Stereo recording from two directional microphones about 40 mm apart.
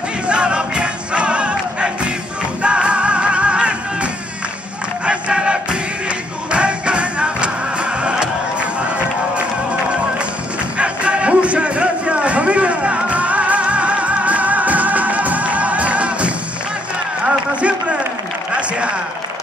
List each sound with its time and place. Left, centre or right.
0.3 s music: right
8.8 s run: right
10.8 s music: right